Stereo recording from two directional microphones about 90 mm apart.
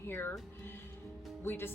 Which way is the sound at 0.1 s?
25° left (ahead or behind).